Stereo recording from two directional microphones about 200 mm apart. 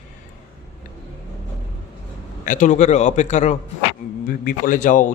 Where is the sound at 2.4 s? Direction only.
40° left (ahead or behind).